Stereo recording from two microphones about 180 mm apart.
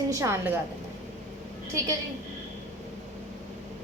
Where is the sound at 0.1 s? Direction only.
15° right (ahead or behind).